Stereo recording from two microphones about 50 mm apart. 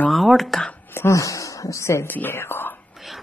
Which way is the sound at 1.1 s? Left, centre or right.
Left.